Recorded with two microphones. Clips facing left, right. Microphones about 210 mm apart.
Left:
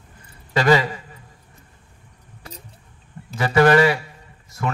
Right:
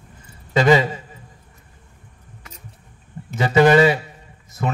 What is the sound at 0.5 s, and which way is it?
Speech, 20° right (ahead or behind).